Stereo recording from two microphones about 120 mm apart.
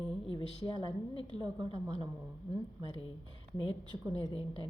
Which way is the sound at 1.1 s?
40° right (ahead or behind).